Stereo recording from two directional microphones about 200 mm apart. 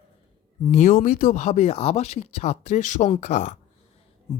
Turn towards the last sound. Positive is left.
turn(degrees=35)  # may be behind; listen again after turning